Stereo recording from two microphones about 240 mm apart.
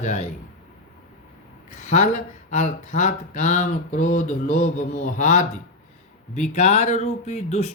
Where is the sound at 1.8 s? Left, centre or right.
Left.